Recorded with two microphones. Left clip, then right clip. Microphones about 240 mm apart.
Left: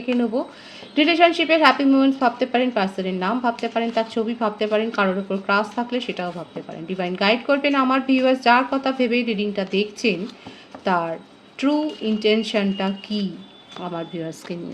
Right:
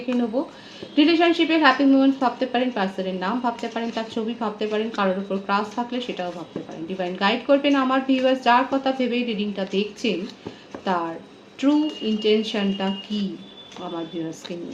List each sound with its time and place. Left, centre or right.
0.9 s a woman's voice: left